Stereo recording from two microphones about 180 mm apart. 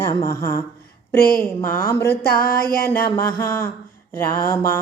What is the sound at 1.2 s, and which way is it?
A woman's voice, 55° left (ahead or behind).